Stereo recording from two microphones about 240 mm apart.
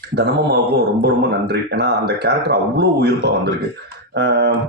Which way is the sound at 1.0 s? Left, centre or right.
Right.